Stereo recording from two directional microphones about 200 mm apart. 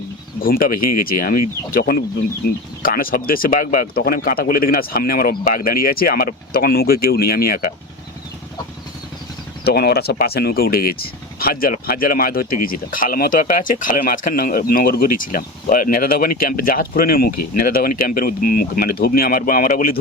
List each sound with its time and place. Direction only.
0.4 s speech: 45° left (ahead or behind)
9.6 s speech: 50° left (ahead or behind)